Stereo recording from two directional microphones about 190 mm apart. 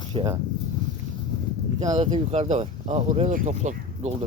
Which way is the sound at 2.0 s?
35° right (ahead or behind).